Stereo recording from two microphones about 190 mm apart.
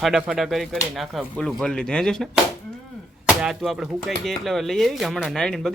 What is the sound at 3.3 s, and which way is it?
Speech, centre (ahead or behind).